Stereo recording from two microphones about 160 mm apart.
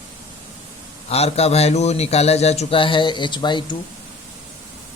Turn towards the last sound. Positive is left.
turn(degrees=30)  # may be behind; listen again after turning